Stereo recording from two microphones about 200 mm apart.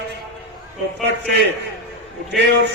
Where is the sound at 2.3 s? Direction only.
60° right (ahead or behind).